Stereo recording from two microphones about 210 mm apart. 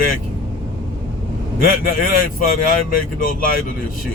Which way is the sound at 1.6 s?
40° left (ahead or behind).